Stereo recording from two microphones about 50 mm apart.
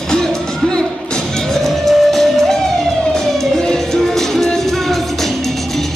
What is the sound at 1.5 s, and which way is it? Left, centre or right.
Music, centre.